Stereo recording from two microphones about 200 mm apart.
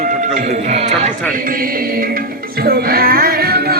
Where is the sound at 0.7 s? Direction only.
35° right (ahead or behind).